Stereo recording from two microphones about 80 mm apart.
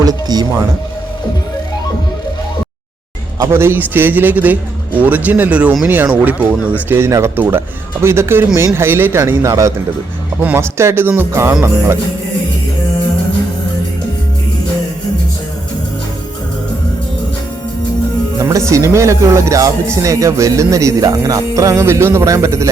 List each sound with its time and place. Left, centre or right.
0.0 s music: right
3.5 s a man's voice: right
6.8 s a man's voice: right
10.4 s a man's voice: right
18.3 s speech: right